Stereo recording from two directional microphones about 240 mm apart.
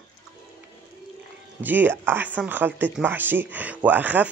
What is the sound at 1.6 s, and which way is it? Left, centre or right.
Speech, centre.